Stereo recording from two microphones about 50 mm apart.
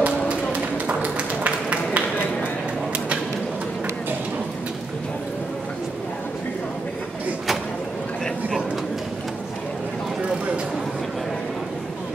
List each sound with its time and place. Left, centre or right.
0.0 s run: right